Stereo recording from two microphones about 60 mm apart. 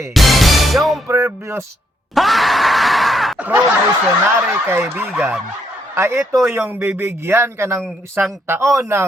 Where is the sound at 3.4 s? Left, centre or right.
Right.